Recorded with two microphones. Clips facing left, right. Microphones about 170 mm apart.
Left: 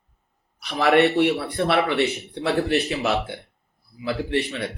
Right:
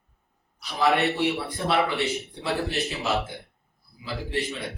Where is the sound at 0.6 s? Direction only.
65° left (ahead or behind).